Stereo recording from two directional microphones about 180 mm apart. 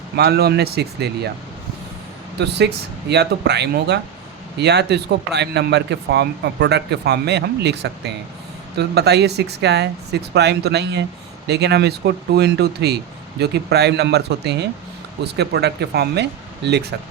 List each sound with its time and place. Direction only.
0.2 s speech: 60° right (ahead or behind)
2.4 s a man's voice: 70° right (ahead or behind)